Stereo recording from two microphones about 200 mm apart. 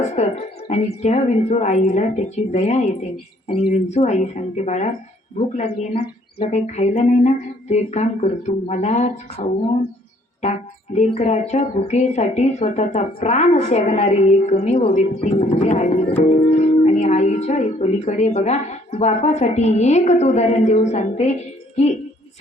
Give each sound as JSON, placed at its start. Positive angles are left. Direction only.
{"t": 0.0, "sound": "speech", "side_deg": 35}
{"t": 10.9, "sound": "speech", "side_deg": 30}